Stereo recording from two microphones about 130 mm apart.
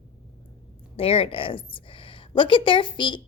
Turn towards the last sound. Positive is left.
turn(degrees=35)  # may be behind; listen again after turning